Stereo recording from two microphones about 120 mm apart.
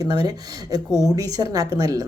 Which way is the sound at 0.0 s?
35° right (ahead or behind).